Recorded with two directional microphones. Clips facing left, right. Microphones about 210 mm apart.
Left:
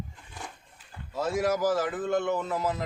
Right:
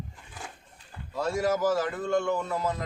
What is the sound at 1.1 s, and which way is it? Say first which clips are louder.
Speech: even; centre (ahead or behind).